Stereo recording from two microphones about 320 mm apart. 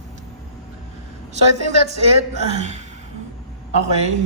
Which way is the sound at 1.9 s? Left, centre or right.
Right.